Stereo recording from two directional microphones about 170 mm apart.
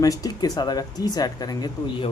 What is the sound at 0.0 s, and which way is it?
Speech, 20° left (ahead or behind).